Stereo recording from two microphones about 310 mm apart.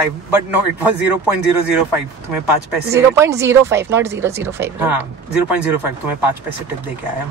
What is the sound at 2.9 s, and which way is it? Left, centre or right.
Speech, centre.